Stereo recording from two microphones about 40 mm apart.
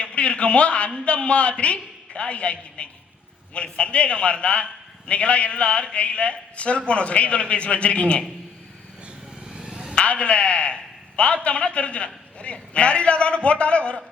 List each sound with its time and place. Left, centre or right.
0.0 s a man's voice: left
9.5 s vehicle: right
9.9 s a man's voice: left